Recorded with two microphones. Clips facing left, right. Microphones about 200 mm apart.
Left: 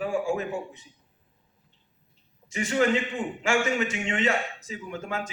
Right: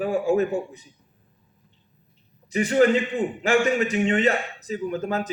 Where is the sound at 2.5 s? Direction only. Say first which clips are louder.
Right 5 dB; 35° right (ahead or behind).